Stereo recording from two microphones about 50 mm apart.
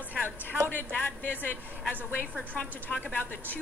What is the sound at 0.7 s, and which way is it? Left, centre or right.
A woman's voice, left.